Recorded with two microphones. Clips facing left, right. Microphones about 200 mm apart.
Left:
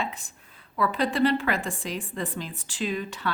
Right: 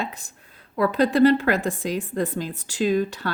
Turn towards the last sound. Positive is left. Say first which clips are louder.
# right 8 dB
turn(degrees=-40)  # may be behind; listen again after turning